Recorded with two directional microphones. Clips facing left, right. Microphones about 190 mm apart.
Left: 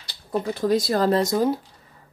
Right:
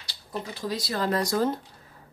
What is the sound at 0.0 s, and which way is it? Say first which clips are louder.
Speech: left 9 dB; 55° left (ahead or behind).